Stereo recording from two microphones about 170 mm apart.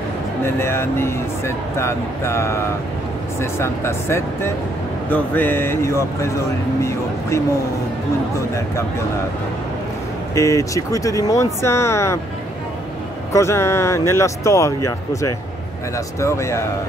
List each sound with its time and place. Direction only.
0.4 s speech: 15° left (ahead or behind)
10.3 s speech: 20° left (ahead or behind)
13.3 s speech: 15° left (ahead or behind)